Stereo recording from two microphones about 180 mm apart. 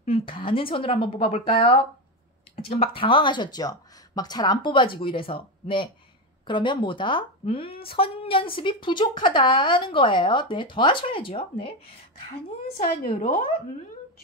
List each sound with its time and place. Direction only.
0.0 s a woman's voice: 30° left (ahead or behind)
12.6 s a woman's voice: 55° left (ahead or behind)